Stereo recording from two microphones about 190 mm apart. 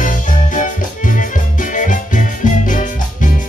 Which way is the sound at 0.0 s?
45° left (ahead or behind).